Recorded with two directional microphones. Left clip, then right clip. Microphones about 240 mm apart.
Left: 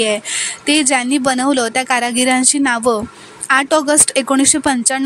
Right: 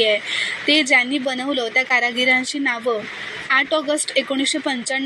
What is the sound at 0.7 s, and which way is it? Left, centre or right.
Speech, left.